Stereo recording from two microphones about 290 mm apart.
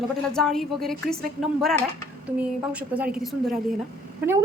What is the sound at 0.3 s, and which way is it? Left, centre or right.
A woman's voice, centre.